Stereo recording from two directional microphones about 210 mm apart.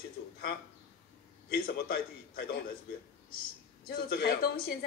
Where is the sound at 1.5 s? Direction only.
45° left (ahead or behind).